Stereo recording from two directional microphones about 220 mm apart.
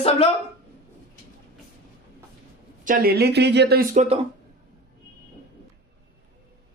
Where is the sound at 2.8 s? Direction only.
40° right (ahead or behind).